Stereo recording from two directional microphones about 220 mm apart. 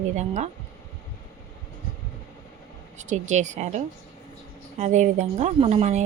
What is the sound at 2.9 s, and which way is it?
Speech, 30° right (ahead or behind).